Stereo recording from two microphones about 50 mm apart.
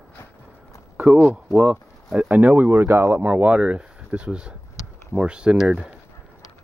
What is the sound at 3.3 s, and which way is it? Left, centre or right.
Speech, right.